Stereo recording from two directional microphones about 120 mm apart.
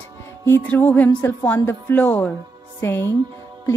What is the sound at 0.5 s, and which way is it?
Music, 15° left (ahead or behind).